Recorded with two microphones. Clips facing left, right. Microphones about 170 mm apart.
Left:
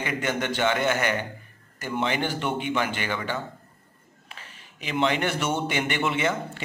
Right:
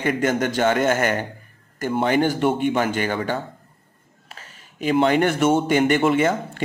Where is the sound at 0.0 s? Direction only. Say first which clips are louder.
Right 7 dB; 45° right (ahead or behind).